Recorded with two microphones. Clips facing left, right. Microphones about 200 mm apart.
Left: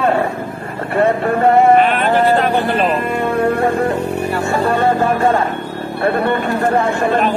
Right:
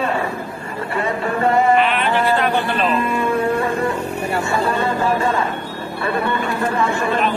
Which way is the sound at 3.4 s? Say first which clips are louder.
Left 4 dB; 65° left (ahead or behind).